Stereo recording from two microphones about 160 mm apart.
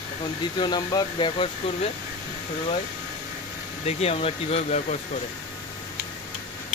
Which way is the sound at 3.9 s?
40° left (ahead or behind).